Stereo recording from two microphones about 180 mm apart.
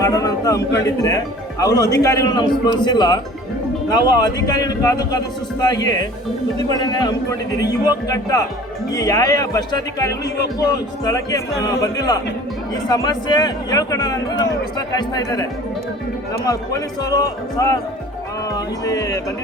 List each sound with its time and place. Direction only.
0.0 s a man's voice: 20° left (ahead or behind)